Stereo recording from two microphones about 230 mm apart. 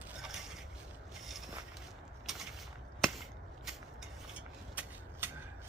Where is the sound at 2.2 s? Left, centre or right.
Centre.